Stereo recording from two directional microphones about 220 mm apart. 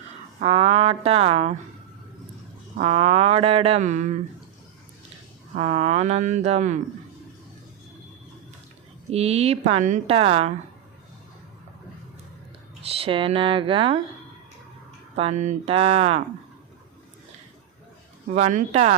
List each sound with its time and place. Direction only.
0.3 s a woman's voice: 25° right (ahead or behind)
2.7 s a woman's voice: 30° right (ahead or behind)
5.5 s a woman's voice: 30° right (ahead or behind)
9.0 s a woman's voice: 30° right (ahead or behind)
12.8 s a woman's voice: 25° right (ahead or behind)
15.1 s a woman's voice: 30° right (ahead or behind)
18.3 s speech: 35° right (ahead or behind)